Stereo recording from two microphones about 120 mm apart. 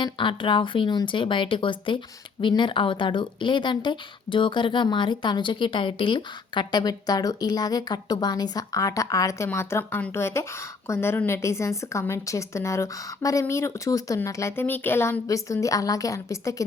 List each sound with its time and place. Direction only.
0.0 s a woman's voice: 40° left (ahead or behind); by 16.6 s 25° left (ahead or behind)